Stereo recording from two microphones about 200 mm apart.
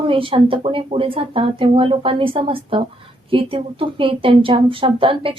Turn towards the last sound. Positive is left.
turn(degrees=-25)  # may be behind; listen again after turning